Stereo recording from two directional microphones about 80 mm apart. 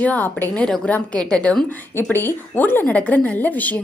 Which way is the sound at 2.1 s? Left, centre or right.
Left.